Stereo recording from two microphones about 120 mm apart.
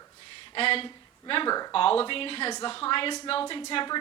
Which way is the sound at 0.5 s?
50° left (ahead or behind).